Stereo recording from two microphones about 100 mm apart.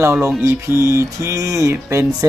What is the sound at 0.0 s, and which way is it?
Music, 30° right (ahead or behind).